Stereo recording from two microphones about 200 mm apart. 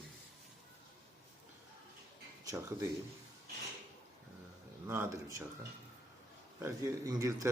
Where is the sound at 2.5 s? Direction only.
15° right (ahead or behind).